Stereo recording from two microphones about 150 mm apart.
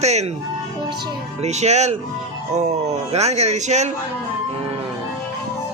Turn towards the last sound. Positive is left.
turn(degrees=-50)  # may be behind; listen again after turning